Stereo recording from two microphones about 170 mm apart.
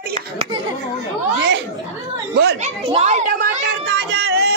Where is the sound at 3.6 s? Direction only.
85° right.